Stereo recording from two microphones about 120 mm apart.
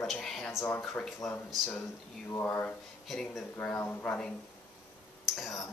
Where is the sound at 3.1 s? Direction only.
5° left (ahead or behind).